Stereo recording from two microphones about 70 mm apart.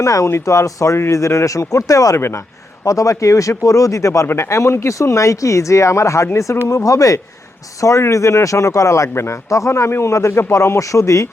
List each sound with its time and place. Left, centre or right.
0.0 s speech: left